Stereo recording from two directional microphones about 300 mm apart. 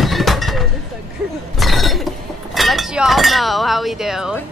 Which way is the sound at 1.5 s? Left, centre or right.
Centre.